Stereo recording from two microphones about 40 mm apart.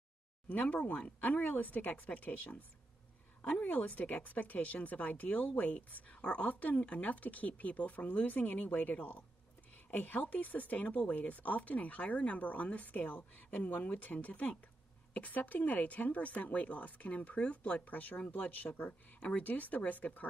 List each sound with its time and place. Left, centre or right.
0.5 s speech: left
3.8 s speech: left
6.0 s speech: left